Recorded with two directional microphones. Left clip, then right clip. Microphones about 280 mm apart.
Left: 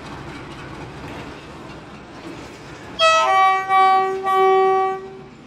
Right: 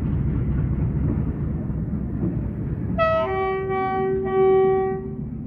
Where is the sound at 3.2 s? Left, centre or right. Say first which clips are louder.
Left 9 dB; left.